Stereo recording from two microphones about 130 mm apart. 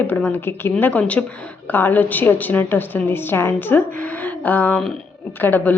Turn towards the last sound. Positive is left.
turn(degrees=15)  # may be behind; listen again after turning